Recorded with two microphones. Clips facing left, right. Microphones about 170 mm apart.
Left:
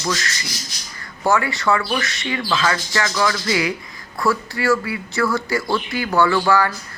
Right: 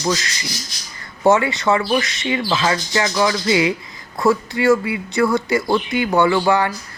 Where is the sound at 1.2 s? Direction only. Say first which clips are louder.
Right 4 dB; 20° right (ahead or behind).